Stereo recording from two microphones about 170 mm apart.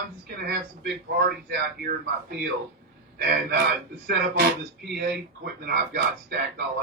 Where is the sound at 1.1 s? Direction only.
65° right (ahead or behind).